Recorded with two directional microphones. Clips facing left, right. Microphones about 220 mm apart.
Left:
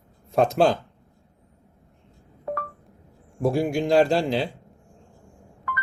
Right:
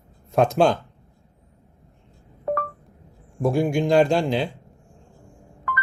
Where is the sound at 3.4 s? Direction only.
5° left (ahead or behind).